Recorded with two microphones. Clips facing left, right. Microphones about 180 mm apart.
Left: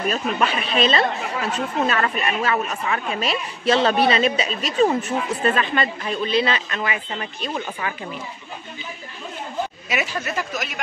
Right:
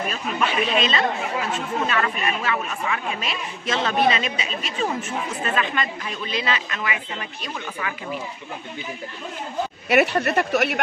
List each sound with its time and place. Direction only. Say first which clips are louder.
0.1 s speech: left 3 dB; 40° left (ahead or behind)
9.8 s speech: right 7 dB; 65° right (ahead or behind)